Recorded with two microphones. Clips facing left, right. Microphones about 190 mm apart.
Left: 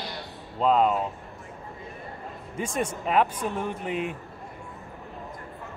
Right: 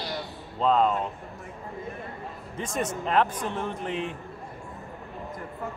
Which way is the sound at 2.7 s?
10° left (ahead or behind).